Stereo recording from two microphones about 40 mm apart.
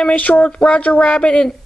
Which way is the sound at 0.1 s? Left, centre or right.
Left.